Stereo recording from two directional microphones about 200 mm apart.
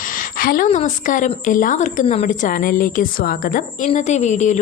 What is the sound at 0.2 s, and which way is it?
A woman's voice, 45° left (ahead or behind).